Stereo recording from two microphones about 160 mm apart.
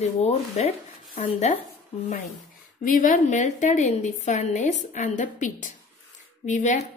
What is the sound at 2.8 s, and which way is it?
A woman's voice, 55° left (ahead or behind).